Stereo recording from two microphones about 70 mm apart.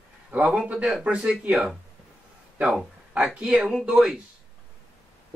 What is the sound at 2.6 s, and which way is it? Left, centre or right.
Speech, centre.